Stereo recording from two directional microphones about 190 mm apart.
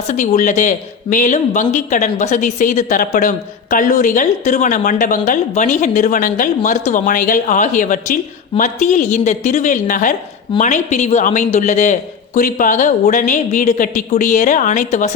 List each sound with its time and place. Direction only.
0.1 s speech: 40° left (ahead or behind)